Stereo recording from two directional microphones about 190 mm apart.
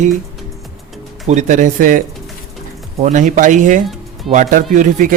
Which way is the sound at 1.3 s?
40° right (ahead or behind).